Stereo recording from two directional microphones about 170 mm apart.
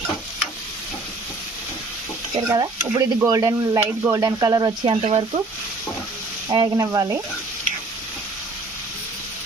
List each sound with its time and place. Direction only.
2.5 s speech: 20° right (ahead or behind)
5.0 s speech: 35° right (ahead or behind)
6.5 s speech: 25° right (ahead or behind)